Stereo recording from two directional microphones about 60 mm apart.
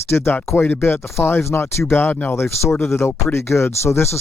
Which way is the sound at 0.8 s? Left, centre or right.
Left.